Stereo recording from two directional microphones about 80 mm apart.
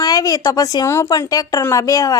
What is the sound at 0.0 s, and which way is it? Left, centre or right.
Speech, left.